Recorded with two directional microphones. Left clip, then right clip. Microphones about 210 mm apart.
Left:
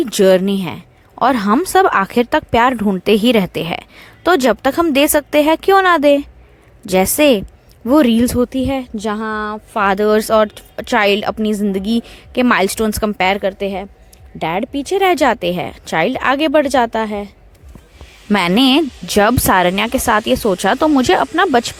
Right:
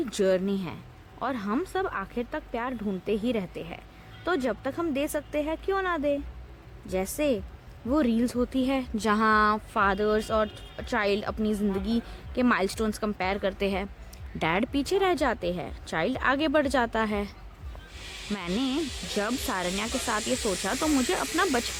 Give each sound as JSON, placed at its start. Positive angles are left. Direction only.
{"t": 0.0, "sound": "speech", "side_deg": 40}
{"t": 9.7, "sound": "speech", "side_deg": 35}
{"t": 14.9, "sound": "speech", "side_deg": 35}
{"t": 18.3, "sound": "speech", "side_deg": 45}